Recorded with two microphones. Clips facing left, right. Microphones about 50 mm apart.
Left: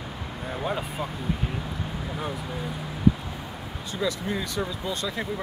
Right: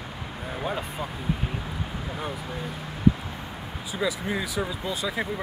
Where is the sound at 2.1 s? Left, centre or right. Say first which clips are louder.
Left 1 dB; centre.